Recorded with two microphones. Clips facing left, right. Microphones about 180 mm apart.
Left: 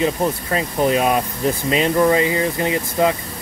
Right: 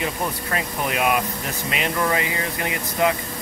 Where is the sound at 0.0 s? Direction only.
25° left (ahead or behind).